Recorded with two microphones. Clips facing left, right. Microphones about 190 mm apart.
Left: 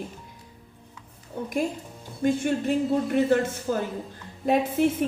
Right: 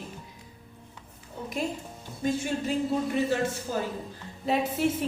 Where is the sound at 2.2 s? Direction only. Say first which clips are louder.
Left 5 dB; 55° left (ahead or behind).